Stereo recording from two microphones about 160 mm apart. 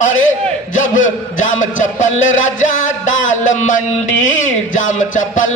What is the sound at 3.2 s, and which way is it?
Music, 50° left (ahead or behind).